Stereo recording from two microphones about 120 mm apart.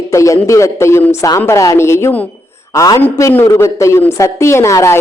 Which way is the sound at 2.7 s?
30° left (ahead or behind).